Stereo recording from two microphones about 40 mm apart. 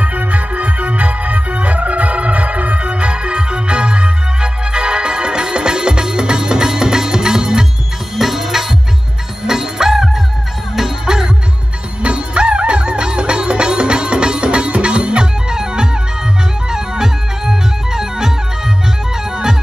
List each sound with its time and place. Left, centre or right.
0.0 s music: right; by 11.2 s centre
12.0 s music: right